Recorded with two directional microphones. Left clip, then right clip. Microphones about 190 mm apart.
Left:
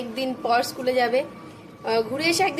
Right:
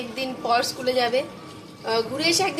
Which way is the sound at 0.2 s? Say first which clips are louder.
Even; 20° left (ahead or behind).